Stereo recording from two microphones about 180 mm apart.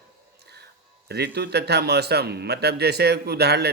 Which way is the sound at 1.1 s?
65° right (ahead or behind).